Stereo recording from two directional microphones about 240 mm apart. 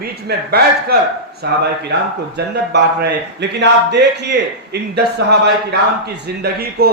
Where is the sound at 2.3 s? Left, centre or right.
Right.